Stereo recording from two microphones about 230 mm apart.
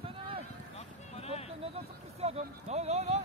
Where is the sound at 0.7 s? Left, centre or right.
Left.